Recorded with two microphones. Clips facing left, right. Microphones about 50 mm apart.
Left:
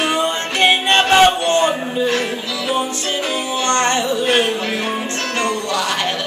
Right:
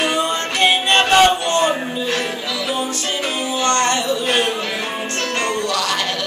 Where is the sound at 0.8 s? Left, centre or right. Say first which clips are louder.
Even; centre.